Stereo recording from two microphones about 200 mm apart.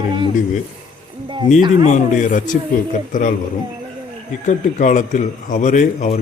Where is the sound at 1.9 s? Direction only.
40° left (ahead or behind).